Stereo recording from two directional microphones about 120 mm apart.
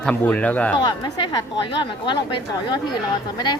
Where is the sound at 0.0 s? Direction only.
10° left (ahead or behind).